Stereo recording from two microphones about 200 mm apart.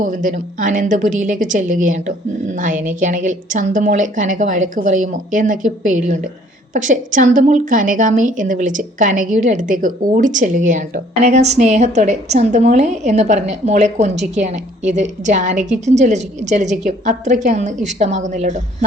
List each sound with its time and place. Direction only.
0.0 s a woman's voice: 40° right (ahead or behind)